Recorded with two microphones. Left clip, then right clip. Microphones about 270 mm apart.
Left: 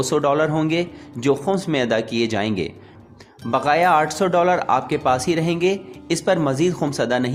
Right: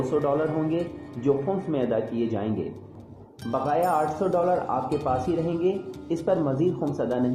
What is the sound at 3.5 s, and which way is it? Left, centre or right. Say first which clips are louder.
Speech: left 7 dB; left.